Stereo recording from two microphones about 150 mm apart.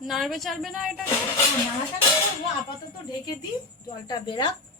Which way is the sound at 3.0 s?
25° left (ahead or behind).